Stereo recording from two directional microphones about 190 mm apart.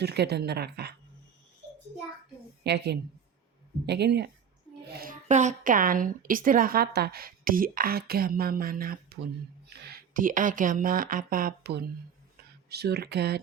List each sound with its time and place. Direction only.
0.0 s a woman's voice: 60° right (ahead or behind)
2.6 s a woman's voice: 60° right (ahead or behind)
4.9 s a woman's voice: 45° right (ahead or behind)